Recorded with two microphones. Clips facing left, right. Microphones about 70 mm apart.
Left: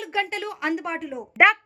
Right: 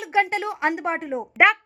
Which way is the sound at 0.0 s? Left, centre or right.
Right.